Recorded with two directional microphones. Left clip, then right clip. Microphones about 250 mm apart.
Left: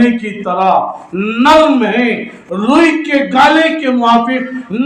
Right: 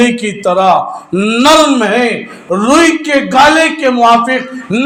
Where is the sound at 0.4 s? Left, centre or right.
Right.